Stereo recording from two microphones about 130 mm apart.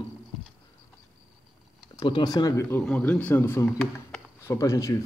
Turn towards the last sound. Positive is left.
turn(degrees=25)  # may be behind; listen again after turning